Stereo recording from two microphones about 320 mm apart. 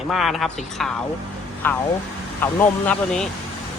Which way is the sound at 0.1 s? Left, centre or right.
Centre.